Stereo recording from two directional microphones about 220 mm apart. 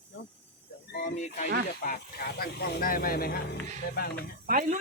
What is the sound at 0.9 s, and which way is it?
Speech, 35° left (ahead or behind).